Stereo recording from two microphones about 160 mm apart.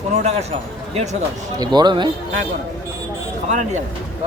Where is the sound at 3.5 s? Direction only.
50° right (ahead or behind).